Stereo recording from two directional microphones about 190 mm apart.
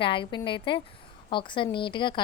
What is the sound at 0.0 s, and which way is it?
A woman's voice, 25° left (ahead or behind).